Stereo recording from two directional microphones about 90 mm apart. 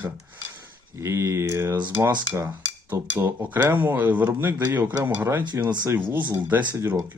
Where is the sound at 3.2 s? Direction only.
25° right (ahead or behind).